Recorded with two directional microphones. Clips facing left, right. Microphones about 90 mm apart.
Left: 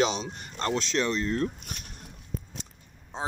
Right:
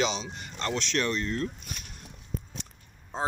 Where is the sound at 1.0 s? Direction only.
25° left (ahead or behind).